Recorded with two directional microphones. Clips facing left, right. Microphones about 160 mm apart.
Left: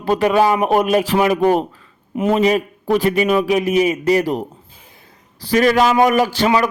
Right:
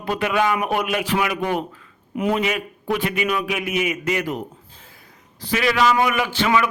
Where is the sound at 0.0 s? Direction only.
40° left (ahead or behind).